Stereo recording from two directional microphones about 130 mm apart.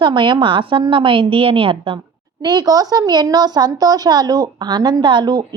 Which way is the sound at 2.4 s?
30° right (ahead or behind).